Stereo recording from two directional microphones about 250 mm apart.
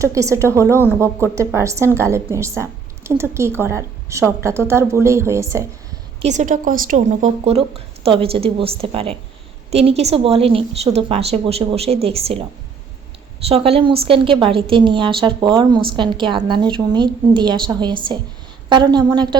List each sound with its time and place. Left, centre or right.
0.0 s a woman's voice: centre
6.2 s a woman's voice: right